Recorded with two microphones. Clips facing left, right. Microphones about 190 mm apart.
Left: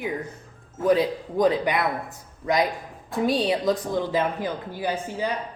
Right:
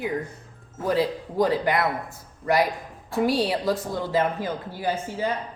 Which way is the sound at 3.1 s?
20° left (ahead or behind).